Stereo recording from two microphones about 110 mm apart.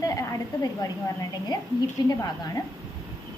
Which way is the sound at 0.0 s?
35° left (ahead or behind).